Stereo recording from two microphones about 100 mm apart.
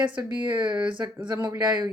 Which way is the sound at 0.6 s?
50° right (ahead or behind).